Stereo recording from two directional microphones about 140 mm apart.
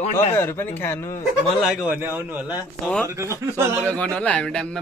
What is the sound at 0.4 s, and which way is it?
Speech, 15° left (ahead or behind).